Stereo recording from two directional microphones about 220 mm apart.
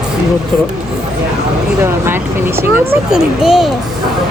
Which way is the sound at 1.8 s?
10° right (ahead or behind).